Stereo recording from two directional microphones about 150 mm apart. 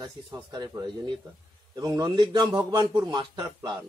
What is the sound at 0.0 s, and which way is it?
Speech, 25° right (ahead or behind).